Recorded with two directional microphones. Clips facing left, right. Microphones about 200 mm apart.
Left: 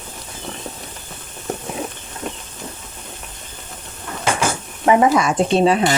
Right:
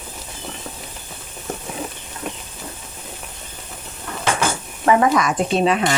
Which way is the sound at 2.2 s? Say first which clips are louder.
Left 1 dB; 5° right (ahead or behind).